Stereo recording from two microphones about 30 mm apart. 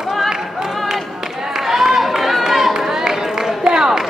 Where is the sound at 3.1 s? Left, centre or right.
Centre.